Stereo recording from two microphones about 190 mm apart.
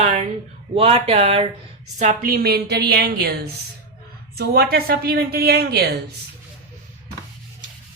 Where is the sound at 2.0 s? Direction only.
45° right (ahead or behind).